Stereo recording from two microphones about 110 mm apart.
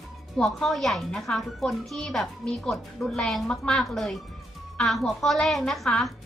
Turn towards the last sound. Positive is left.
turn(degrees=0)  # may be behind; listen again after turning